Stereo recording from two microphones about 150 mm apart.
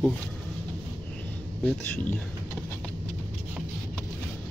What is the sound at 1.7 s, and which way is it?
Speech, 10° left (ahead or behind).